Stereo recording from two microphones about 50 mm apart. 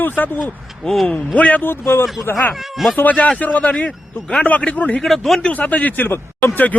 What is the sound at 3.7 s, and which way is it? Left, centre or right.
Speech, centre.